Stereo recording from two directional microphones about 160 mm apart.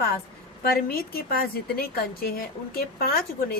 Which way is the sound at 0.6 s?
70° left (ahead or behind).